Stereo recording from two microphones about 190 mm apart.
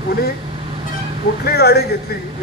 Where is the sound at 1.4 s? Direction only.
55° left (ahead or behind).